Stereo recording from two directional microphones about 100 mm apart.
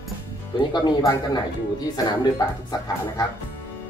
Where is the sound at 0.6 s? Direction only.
45° left (ahead or behind).